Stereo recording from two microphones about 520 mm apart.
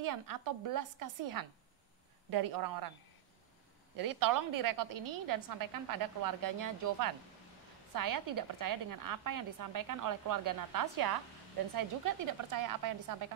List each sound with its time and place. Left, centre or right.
0.0 s a woman's voice: right
3.9 s a woman's voice: right
12.3 s a woman's voice: right